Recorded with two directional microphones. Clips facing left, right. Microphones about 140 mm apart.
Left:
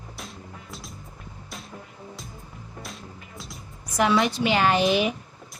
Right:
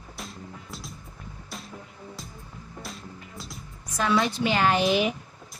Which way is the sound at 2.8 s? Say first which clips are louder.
Even; centre (ahead or behind).